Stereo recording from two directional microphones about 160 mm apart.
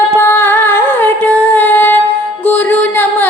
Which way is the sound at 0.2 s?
15° left (ahead or behind).